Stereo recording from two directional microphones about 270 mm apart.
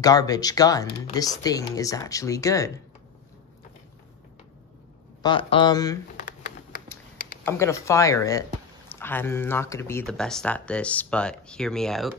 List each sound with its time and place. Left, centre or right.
0.0 s speech: centre
5.2 s speech: centre
7.4 s speech: centre